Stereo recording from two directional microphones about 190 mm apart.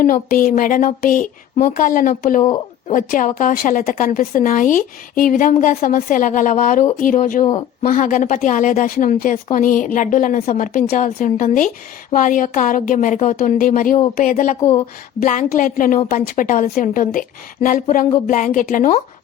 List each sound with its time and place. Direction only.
0.0 s a woman's voice: 45° left (ahead or behind)